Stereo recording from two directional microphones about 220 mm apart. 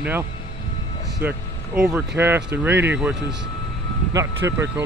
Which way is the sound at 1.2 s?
10° right (ahead or behind).